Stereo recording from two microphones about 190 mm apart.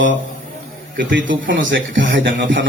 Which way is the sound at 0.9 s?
75° right (ahead or behind).